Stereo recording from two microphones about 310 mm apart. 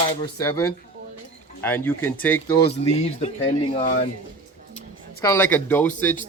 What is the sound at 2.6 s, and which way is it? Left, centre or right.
Speech, centre.